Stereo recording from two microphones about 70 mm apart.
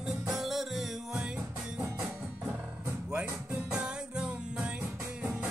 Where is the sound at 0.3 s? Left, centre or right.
Centre.